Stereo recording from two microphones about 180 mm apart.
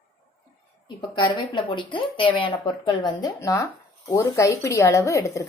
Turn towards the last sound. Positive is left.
turn(degrees=15)  # may be behind; listen again after turning